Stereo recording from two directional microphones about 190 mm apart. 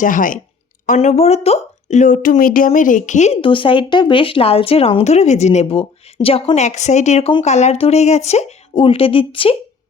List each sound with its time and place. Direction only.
0.0 s speech: 45° left (ahead or behind); by 9.6 s 30° left (ahead or behind)